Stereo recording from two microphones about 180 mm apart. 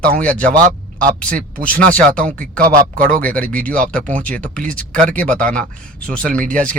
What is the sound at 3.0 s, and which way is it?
Speech, 50° right (ahead or behind).